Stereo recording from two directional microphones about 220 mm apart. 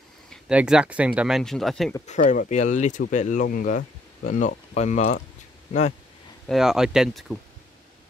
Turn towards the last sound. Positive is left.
turn(degrees=0)  # may be behind; listen again after turning